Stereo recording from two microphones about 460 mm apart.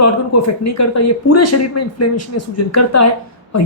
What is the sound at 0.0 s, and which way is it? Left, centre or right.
A woman's voice, left.